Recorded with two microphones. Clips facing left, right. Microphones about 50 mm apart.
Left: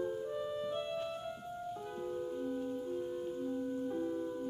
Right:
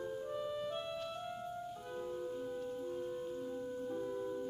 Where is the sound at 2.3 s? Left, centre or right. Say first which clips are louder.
Left 3 dB; centre.